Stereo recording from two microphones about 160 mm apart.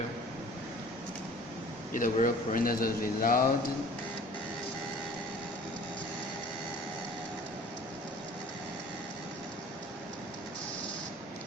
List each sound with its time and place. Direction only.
1.9 s a man's voice: 55° left (ahead or behind)